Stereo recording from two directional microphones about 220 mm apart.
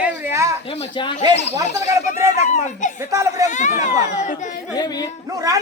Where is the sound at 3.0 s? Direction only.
15° right (ahead or behind).